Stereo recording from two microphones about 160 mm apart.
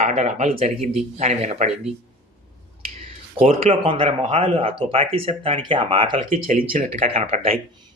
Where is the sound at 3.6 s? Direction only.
35° right (ahead or behind).